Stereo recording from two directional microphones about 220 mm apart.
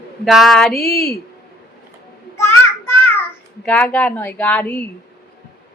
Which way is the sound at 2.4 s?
10° left (ahead or behind).